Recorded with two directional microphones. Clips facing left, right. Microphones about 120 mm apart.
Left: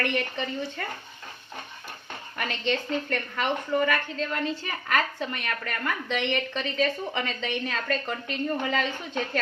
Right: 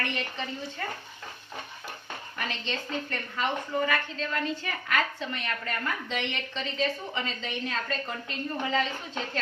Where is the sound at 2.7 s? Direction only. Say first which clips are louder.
Left 9 dB; 65° left (ahead or behind).